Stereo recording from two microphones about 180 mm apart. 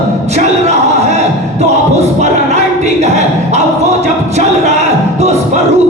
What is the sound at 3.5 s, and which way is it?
Speech, 40° right (ahead or behind).